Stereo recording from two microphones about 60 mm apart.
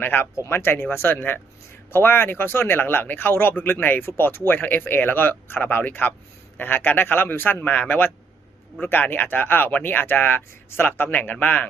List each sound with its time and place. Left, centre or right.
0.0 s speech: left
0.3 s speech: left